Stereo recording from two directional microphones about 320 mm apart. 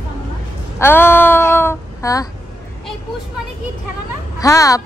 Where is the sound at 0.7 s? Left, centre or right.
Centre.